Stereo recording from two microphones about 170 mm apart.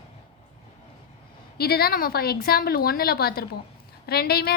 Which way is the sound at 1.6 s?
65° left (ahead or behind).